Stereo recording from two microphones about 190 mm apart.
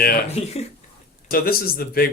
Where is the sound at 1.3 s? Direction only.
50° left (ahead or behind).